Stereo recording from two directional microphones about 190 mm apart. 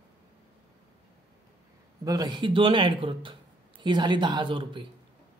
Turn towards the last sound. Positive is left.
turn(degrees=-25)  # may be behind; listen again after turning